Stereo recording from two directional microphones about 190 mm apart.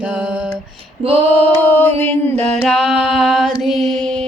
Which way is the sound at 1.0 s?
30° right (ahead or behind).